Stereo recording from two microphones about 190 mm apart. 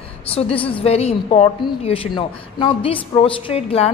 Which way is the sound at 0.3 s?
30° left (ahead or behind).